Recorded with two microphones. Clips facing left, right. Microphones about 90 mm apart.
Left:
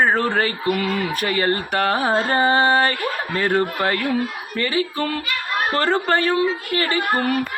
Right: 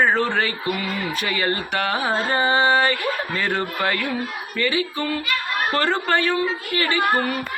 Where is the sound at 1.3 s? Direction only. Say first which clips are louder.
Left 3 dB; 40° left (ahead or behind).